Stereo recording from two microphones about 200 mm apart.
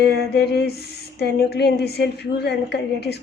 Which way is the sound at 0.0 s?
55° left (ahead or behind).